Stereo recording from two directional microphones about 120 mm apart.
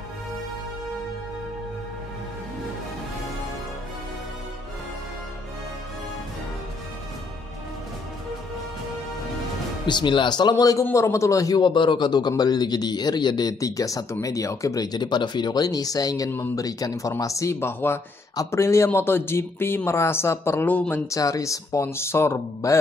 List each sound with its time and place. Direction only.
9.8 s a man's voice: 40° left (ahead or behind)
10.5 s a man's voice: 25° left (ahead or behind)
16.3 s speech: 15° left (ahead or behind)
16.5 s speech: 30° left (ahead or behind); by 21.0 s 10° left (ahead or behind)
21.1 s speech: 30° left (ahead or behind)